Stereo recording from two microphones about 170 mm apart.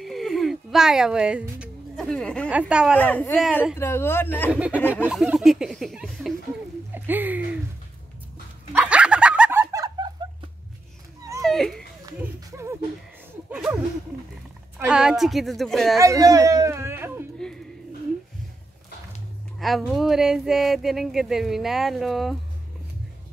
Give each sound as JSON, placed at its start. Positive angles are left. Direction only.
{"t": 0.0, "sound": "a sound", "side_deg": 0}
{"t": 2.5, "sound": "speech", "side_deg": -5}
{"t": 3.0, "sound": "speech", "side_deg": 10}
{"t": 4.5, "sound": "speech", "side_deg": -10}
{"t": 6.9, "sound": "speech", "side_deg": -10}
{"t": 8.7, "sound": "dog", "side_deg": -5}
{"t": 11.4, "sound": "children playing", "side_deg": 0}
{"t": 12.2, "sound": "a sound", "side_deg": -15}
{"t": 14.8, "sound": "speech", "side_deg": -5}
{"t": 16.0, "sound": "a sound", "side_deg": -20}
{"t": 19.6, "sound": "speech", "side_deg": 0}